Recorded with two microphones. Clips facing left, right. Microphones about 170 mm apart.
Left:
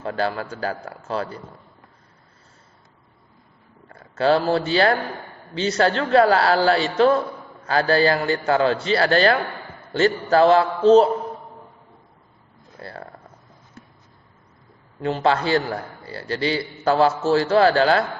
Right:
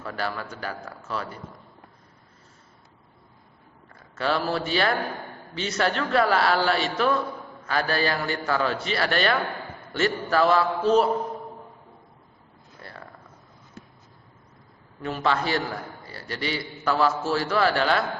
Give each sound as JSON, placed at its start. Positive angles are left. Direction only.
{"t": 0.0, "sound": "a man's voice", "side_deg": 30}
{"t": 4.2, "sound": "a man's voice", "side_deg": 30}
{"t": 15.0, "sound": "a man's voice", "side_deg": 30}